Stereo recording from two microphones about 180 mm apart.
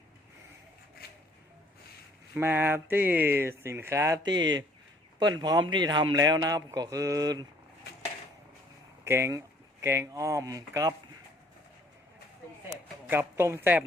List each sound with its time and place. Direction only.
1.0 s a sound: 60° left (ahead or behind)
2.3 s speech: 10° right (ahead or behind)
9.0 s speech: 15° right (ahead or behind)
13.1 s speech: 10° right (ahead or behind)